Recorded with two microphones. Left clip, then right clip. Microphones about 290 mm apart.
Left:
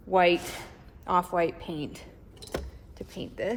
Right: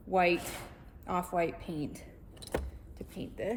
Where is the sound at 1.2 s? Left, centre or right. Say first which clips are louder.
Left 5 dB; centre.